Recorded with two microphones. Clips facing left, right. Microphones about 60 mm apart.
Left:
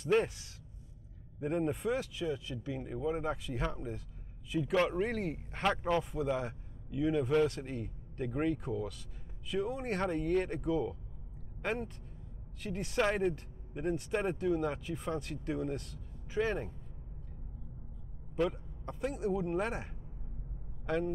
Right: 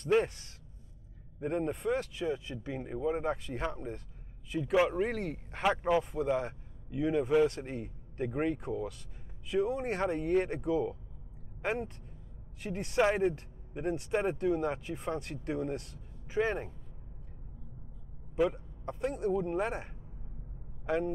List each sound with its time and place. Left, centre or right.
0.0 s speech: centre
2.1 s speech: right
3.1 s a man's voice: centre
18.3 s a man's voice: centre